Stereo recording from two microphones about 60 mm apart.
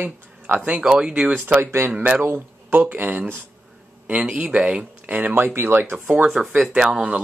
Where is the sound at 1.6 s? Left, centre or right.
Right.